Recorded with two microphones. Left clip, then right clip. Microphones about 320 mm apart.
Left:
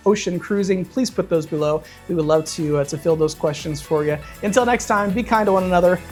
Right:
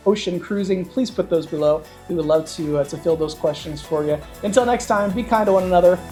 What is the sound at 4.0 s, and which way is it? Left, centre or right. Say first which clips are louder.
Speech: even; left.